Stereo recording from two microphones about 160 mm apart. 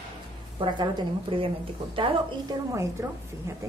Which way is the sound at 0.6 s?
30° right (ahead or behind).